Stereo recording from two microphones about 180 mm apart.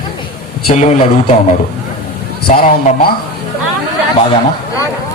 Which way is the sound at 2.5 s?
55° left (ahead or behind).